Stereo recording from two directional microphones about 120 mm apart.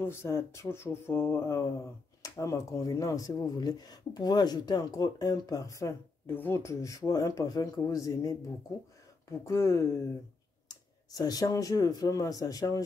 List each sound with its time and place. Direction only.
0.0 s speech: 20° left (ahead or behind)
11.1 s speech: 30° left (ahead or behind)